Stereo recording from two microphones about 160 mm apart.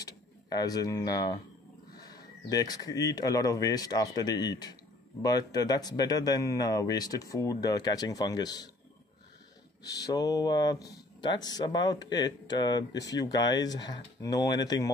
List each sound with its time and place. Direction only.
0.0 s speech: 25° left (ahead or behind)
10.0 s speech: 25° left (ahead or behind)